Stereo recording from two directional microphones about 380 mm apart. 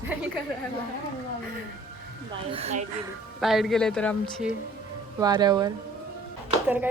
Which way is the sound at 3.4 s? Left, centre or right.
Centre.